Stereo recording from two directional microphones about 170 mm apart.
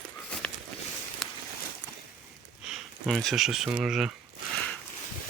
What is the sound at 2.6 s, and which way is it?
Speech, centre (ahead or behind).